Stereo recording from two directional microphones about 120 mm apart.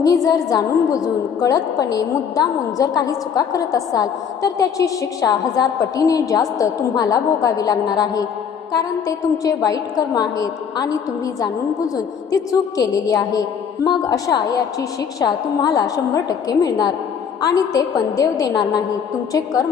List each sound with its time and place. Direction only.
0.0 s a woman's voice: 30° left (ahead or behind)
11.9 s a woman's voice: 30° left (ahead or behind)